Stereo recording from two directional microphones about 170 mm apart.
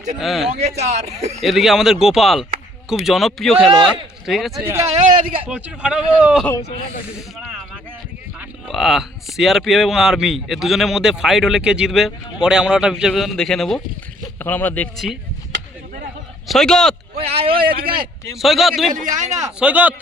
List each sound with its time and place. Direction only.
0.2 s a man's voice: centre (ahead or behind)
0.6 s speech: 40° right (ahead or behind)
1.4 s a man's voice: centre (ahead or behind)
4.6 s speech: 15° right (ahead or behind)
4.9 s speech: 40° right (ahead or behind)
5.5 s speech: 5° right (ahead or behind)
6.4 s speech: 15° left (ahead or behind)
8.4 s a man's voice: centre (ahead or behind)
16.5 s a man's voice: 5° left (ahead or behind)
17.2 s speech: 35° right (ahead or behind)
17.6 s speech: 60° right (ahead or behind)
18.3 s a man's voice: centre (ahead or behind)
18.9 s a man's voice: 50° right (ahead or behind)
19.5 s speech: 10° right (ahead or behind)